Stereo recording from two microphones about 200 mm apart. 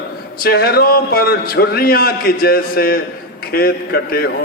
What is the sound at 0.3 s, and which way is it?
Speech, 50° left (ahead or behind).